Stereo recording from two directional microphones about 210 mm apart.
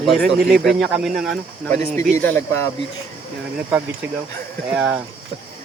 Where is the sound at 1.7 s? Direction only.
35° right (ahead or behind).